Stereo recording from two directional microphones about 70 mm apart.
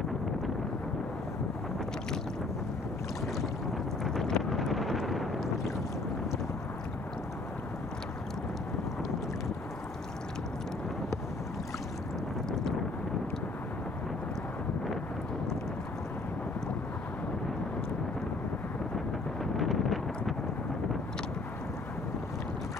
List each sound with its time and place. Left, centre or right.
4.0 s boat: centre
19.5 s wind noise: centre